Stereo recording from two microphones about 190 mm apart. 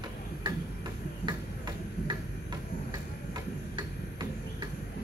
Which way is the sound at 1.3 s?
20° right (ahead or behind).